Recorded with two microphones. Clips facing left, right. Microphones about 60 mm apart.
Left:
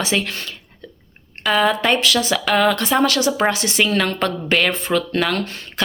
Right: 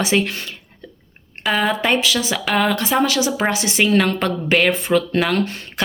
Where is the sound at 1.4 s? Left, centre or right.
Centre.